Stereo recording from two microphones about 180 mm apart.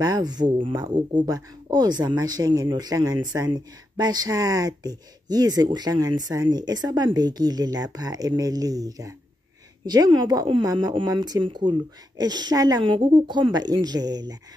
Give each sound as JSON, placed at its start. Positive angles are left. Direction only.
{"t": 0.0, "sound": "speech", "side_deg": -25}